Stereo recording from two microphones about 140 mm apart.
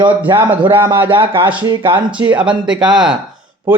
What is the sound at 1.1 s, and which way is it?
Speech, 35° right (ahead or behind).